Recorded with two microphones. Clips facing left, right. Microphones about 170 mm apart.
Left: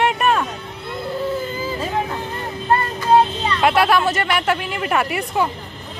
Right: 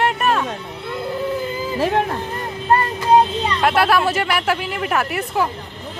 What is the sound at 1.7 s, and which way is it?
Speech, 80° right.